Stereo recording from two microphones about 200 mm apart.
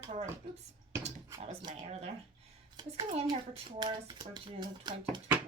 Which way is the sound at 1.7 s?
35° right (ahead or behind).